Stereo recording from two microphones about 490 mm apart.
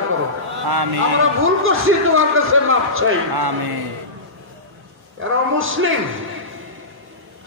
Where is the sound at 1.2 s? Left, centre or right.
Right.